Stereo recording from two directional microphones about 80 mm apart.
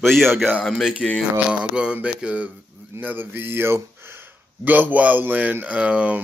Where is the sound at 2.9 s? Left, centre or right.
Right.